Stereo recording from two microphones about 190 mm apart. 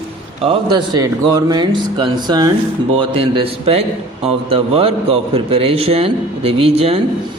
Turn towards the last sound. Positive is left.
turn(degrees=-30)  # may be behind; listen again after turning